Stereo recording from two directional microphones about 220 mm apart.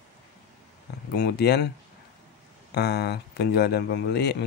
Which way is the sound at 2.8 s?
50° left (ahead or behind).